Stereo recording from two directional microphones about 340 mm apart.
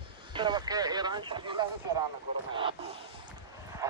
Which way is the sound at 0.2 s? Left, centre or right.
Centre.